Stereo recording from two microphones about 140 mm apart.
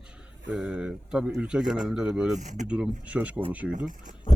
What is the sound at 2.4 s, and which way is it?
Speech, 60° right (ahead or behind).